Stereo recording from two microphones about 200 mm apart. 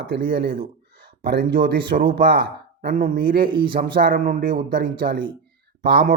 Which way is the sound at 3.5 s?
25° right (ahead or behind).